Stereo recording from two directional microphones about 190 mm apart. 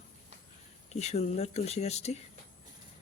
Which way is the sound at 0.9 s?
35° left (ahead or behind).